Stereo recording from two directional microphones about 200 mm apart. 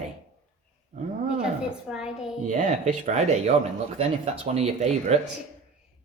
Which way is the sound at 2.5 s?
40° right (ahead or behind).